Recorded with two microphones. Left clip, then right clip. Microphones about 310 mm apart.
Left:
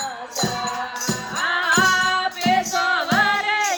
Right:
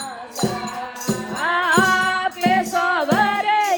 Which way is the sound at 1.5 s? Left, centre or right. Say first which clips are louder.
Right 1 dB; centre.